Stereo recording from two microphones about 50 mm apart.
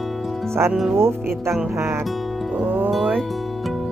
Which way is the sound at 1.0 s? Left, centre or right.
Right.